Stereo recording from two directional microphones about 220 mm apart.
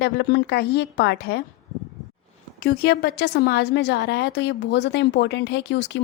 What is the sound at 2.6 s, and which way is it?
A woman's voice, 45° left (ahead or behind).